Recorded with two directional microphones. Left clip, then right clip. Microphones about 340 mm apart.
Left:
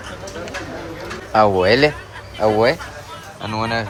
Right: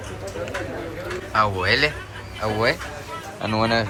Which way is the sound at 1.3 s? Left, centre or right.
Centre.